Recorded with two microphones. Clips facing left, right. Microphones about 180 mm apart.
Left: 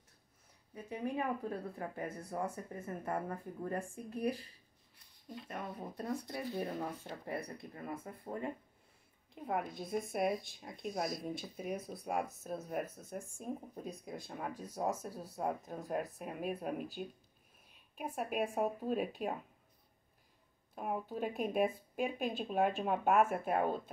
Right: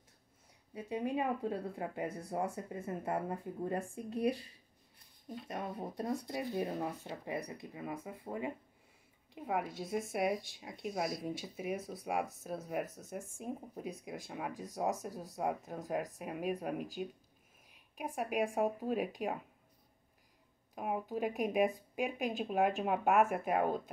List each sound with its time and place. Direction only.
0.7 s speech: 20° right (ahead or behind)
5.5 s speech: 30° right (ahead or behind)
6.2 s speech: 15° right (ahead or behind)
20.7 s speech: 10° right (ahead or behind)